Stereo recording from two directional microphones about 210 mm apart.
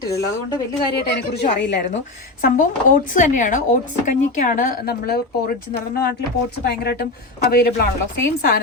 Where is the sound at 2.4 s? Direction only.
40° left (ahead or behind).